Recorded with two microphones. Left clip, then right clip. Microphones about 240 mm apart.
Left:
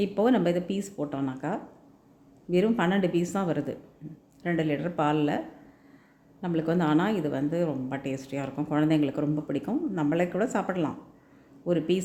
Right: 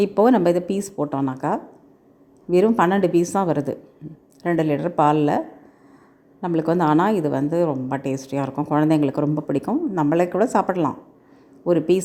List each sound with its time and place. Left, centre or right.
0.0 s a woman's voice: right
6.4 s a woman's voice: centre